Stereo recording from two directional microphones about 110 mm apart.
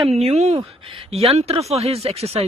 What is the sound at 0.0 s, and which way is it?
Speech, 70° right (ahead or behind).